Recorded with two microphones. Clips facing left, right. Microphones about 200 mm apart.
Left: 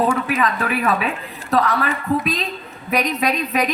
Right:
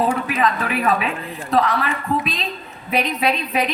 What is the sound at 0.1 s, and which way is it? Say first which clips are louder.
A woman's voice: even; 45° left (ahead or behind).